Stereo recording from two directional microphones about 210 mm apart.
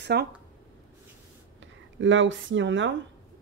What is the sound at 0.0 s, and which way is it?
Speech, 50° right (ahead or behind).